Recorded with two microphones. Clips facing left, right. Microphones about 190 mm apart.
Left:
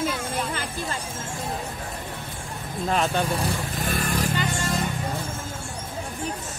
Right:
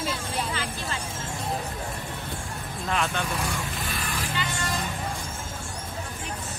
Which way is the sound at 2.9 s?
35° left (ahead or behind).